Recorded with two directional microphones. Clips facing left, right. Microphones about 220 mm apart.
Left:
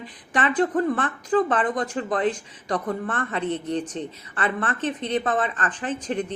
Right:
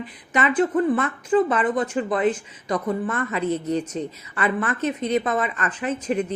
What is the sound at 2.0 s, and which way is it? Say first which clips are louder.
A woman's voice: right 3 dB; 35° left (ahead or behind).